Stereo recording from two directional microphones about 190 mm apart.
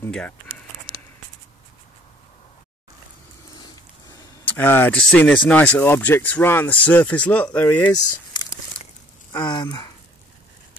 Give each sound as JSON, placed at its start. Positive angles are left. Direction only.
{"t": 0.0, "sound": "speech", "side_deg": 5}
{"t": 4.5, "sound": "speech", "side_deg": 10}
{"t": 7.8, "sound": "a sound", "side_deg": 20}